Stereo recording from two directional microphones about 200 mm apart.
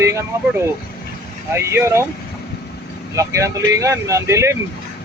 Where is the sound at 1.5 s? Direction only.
15° right (ahead or behind).